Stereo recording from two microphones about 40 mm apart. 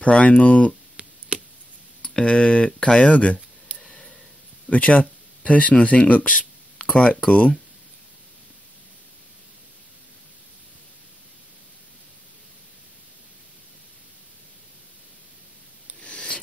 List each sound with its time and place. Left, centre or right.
0.0 s speech: left
1.0 s chop: right
2.0 s speech: left
3.1 s speech: left
3.9 s a sound: centre
4.6 s speech: left
7.2 s speech: left
16.0 s a sound: left